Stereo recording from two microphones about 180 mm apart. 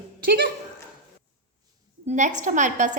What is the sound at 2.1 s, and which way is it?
Speech, 45° right (ahead or behind).